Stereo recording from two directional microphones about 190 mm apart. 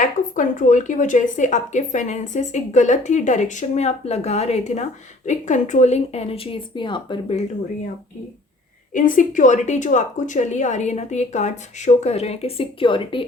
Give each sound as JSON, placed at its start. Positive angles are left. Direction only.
{"t": 0.0, "sound": "a woman's voice", "side_deg": 40}
{"t": 8.9, "sound": "a woman's voice", "side_deg": 45}